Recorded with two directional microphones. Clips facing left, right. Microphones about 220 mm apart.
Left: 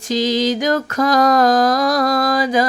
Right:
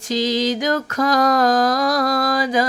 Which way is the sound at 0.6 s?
40° left (ahead or behind).